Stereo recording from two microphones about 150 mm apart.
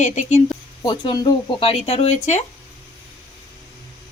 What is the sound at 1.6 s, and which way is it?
Speech, 45° left (ahead or behind).